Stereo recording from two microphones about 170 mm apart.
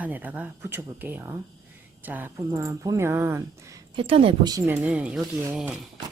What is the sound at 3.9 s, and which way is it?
Speech, 35° right (ahead or behind).